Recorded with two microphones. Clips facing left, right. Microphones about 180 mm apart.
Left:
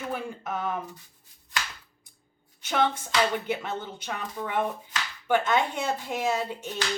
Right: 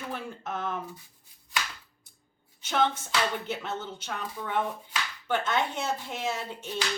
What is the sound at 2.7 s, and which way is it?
Speech, 10° left (ahead or behind).